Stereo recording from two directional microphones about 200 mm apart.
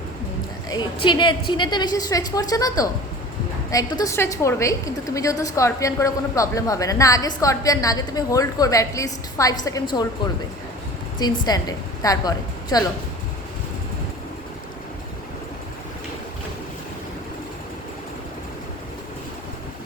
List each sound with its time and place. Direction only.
1.0 s a woman's voice: 25° left (ahead or behind)
11.2 s a woman's voice: 20° left (ahead or behind)